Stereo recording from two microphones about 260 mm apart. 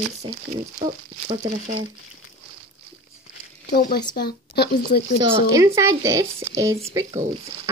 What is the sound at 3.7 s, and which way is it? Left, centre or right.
Speech, left.